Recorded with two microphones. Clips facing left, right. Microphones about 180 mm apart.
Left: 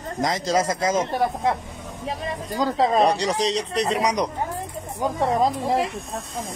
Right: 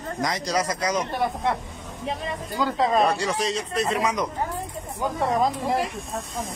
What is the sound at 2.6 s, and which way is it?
Speech, 35° left (ahead or behind).